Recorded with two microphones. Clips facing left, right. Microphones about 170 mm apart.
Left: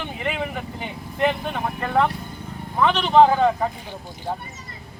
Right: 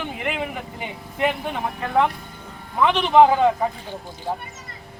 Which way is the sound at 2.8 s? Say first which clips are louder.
Right 1 dB; 15° right (ahead or behind).